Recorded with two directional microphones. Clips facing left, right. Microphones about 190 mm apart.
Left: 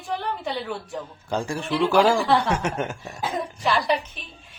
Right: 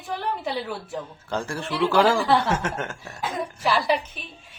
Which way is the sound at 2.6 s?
15° left (ahead or behind).